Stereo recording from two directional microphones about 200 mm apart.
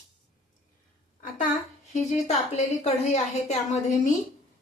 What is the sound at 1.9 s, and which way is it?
A woman's voice, 35° left (ahead or behind).